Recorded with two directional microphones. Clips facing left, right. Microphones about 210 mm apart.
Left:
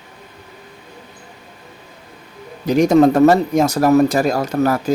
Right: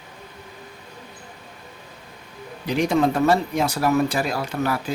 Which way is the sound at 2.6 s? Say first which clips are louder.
Left 8 dB; 45° left (ahead or behind).